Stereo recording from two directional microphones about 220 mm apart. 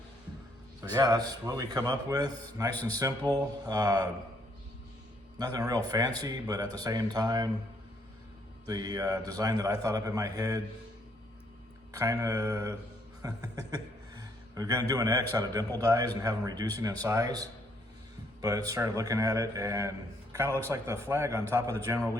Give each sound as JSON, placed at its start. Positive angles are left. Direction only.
{"t": 0.8, "sound": "speech", "side_deg": -15}
{"t": 5.4, "sound": "speech", "side_deg": -15}
{"t": 8.6, "sound": "speech", "side_deg": -15}
{"t": 11.9, "sound": "a man's voice", "side_deg": -15}